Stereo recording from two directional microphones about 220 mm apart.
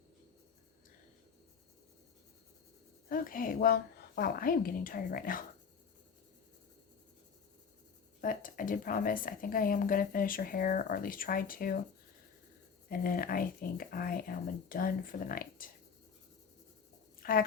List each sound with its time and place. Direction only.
3.1 s a woman's voice: 40° left (ahead or behind)
8.2 s a woman's voice: 35° left (ahead or behind)
12.9 s a woman's voice: 40° left (ahead or behind)
17.2 s speech: 40° left (ahead or behind)